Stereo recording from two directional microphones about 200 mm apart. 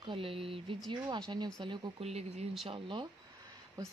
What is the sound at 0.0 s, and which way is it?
Speech, 25° right (ahead or behind).